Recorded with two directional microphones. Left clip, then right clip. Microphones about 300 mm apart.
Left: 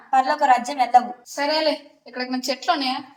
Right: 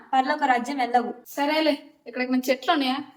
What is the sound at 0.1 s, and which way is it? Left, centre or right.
A woman's voice, centre.